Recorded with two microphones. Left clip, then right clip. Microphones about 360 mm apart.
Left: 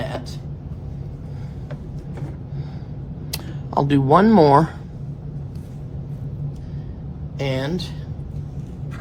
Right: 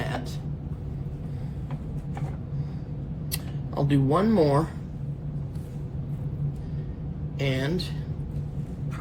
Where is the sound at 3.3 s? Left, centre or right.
Left.